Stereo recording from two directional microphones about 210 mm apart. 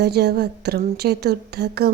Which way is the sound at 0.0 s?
50° right (ahead or behind).